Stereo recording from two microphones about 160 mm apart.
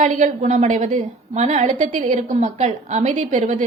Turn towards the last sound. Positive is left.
turn(degrees=-50)  # may be behind; listen again after turning